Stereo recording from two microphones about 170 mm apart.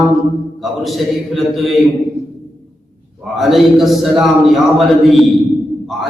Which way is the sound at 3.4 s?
Centre (ahead or behind).